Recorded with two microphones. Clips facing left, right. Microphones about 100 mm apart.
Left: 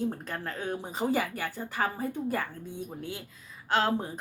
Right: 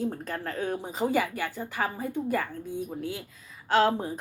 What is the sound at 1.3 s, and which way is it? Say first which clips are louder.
A woman's voice: right 1 dB; 45° left (ahead or behind).